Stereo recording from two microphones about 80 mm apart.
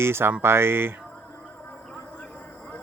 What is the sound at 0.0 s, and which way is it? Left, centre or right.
Speech, right.